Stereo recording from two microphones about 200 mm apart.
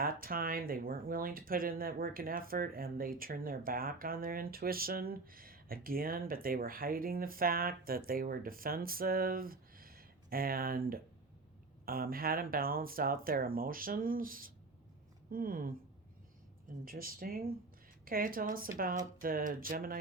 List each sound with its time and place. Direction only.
0.0 s speech: 45° right (ahead or behind)
16.8 s speech: 45° right (ahead or behind)